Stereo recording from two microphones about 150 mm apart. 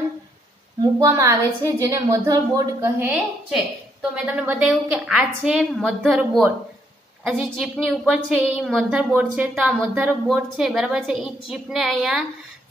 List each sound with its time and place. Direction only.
0.9 s a woman's voice: 20° right (ahead or behind)
10.2 s a woman's voice: centre (ahead or behind)